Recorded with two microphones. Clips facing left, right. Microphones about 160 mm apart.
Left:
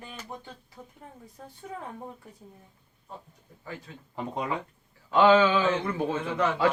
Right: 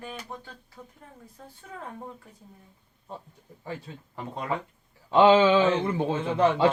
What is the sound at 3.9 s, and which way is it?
Speech, 25° right (ahead or behind).